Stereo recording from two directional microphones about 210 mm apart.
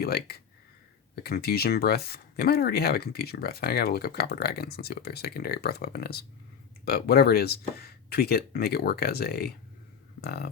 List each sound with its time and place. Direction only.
0.0 s speech: 50° left (ahead or behind)